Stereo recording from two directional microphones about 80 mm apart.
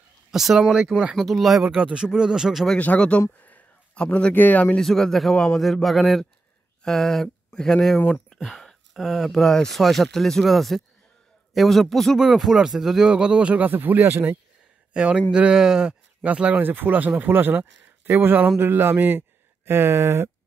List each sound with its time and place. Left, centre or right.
0.3 s speech: centre
2.8 s a man's voice: centre
4.7 s speech: centre; by 14.4 s right
15.0 s speech: centre; by 20.2 s right